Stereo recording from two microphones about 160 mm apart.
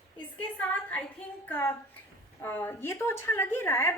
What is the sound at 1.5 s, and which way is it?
A woman's voice, 10° left (ahead or behind).